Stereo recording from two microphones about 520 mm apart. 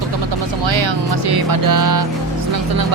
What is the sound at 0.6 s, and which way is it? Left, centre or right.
Speech, right.